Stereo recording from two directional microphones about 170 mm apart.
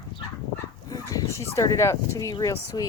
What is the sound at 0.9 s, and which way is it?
Speech, 20° left (ahead or behind).